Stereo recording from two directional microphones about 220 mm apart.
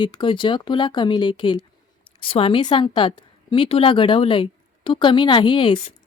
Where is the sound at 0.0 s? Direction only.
20° left (ahead or behind).